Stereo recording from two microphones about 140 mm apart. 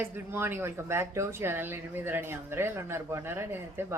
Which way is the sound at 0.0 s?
15° right (ahead or behind).